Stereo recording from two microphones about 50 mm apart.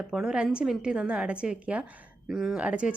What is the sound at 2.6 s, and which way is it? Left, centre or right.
Speech, right.